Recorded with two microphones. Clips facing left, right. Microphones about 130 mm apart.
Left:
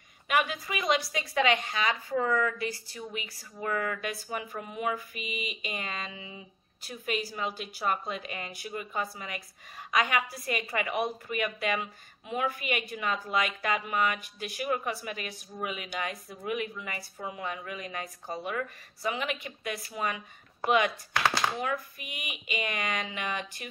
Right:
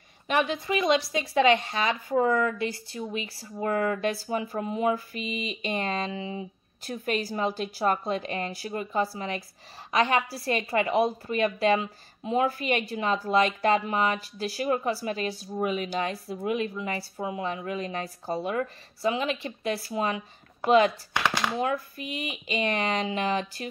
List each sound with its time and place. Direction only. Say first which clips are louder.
0.3 s a woman's voice: right 3 dB; 30° right (ahead or behind)
21.5 s a woman's voice: right 5 dB; 25° right (ahead or behind)